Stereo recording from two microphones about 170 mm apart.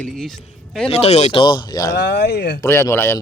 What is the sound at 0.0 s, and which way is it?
Speech, centre (ahead or behind).